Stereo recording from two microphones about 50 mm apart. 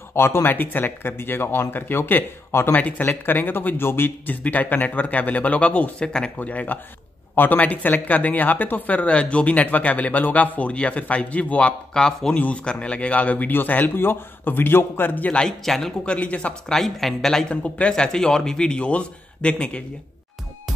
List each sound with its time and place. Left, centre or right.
0.1 s speech: left
5.9 s a man's voice: centre
6.4 s speech: left
11.9 s speech: centre
12.4 s a man's voice: left
15.3 s speech: centre
16.1 s a man's voice: left
16.6 s speech: centre
17.5 s a man's voice: left